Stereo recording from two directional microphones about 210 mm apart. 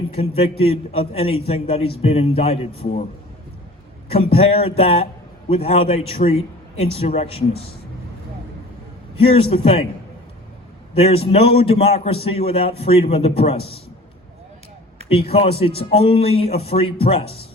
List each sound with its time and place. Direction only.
0.2 s a man's voice: 25° left (ahead or behind)
4.1 s a man's voice: 30° left (ahead or behind)
9.1 s a man's voice: 25° left (ahead or behind)
10.9 s a man's voice: 30° left (ahead or behind)
15.1 s a man's voice: 30° left (ahead or behind)